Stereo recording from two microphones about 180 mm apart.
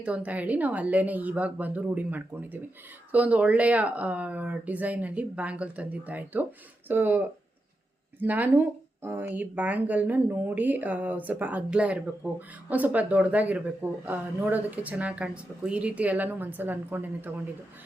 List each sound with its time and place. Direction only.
0.0 s speech: 10° right (ahead or behind)
8.2 s speech: 10° right (ahead or behind)